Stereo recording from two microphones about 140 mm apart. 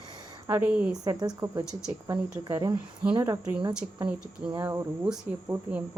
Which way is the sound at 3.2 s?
20° right (ahead or behind).